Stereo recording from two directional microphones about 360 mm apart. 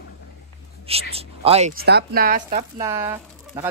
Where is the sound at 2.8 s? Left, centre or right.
Centre.